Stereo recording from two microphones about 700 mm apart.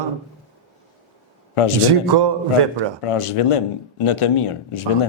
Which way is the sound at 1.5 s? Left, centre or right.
Left.